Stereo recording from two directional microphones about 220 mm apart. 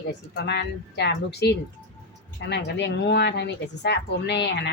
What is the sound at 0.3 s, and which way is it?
Speech, 50° left (ahead or behind).